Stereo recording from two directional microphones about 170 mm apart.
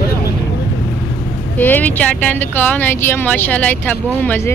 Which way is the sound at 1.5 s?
10° left (ahead or behind).